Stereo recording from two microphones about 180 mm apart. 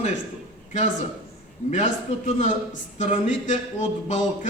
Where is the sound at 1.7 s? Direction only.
40° left (ahead or behind).